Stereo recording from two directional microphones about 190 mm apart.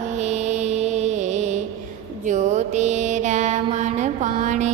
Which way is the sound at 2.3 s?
40° right (ahead or behind).